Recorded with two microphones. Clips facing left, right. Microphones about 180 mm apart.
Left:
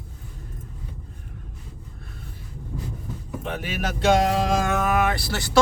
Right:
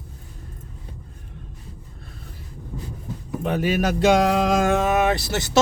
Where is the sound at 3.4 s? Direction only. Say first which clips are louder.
Right 8 dB; 40° right (ahead or behind).